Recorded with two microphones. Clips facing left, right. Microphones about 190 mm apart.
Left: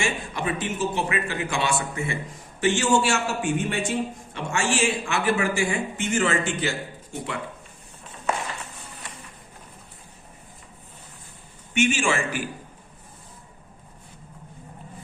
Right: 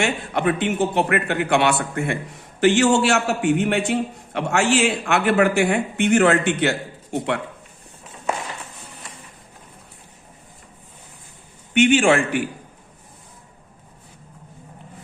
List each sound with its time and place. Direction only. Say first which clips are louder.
0.0 s a man's voice: right 6 dB; 65° right (ahead or behind)
11.7 s a man's voice: right 7 dB; 60° right (ahead or behind)